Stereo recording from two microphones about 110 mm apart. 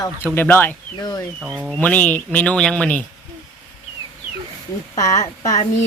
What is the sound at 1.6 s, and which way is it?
Speech, 10° left (ahead or behind).